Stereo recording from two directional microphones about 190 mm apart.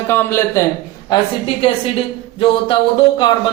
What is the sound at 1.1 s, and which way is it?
Speech, 30° left (ahead or behind).